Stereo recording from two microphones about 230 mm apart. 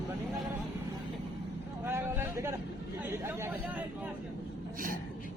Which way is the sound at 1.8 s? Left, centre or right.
Centre.